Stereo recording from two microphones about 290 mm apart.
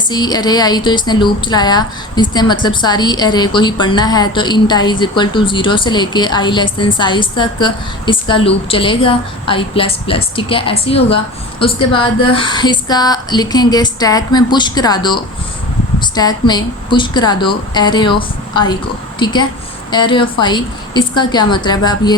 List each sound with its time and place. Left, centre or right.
0.1 s a woman's voice: centre